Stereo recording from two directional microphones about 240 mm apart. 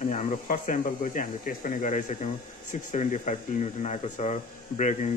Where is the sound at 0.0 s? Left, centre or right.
Left.